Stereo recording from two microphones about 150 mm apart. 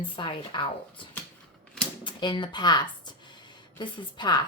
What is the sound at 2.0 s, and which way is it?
A woman's voice, 30° left (ahead or behind).